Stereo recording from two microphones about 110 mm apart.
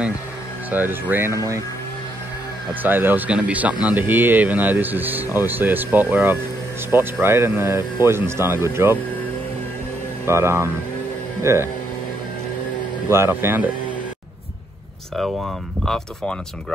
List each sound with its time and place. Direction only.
0.7 s speech: 15° right (ahead or behind)
2.8 s speech: 20° right (ahead or behind)
10.2 s speech: 25° right (ahead or behind)
13.1 s speech: 20° right (ahead or behind)
15.1 s speech: centre (ahead or behind)